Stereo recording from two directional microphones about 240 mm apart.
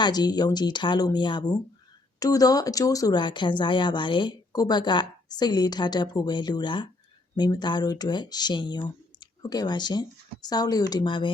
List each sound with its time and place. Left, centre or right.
0.0 s speech: centre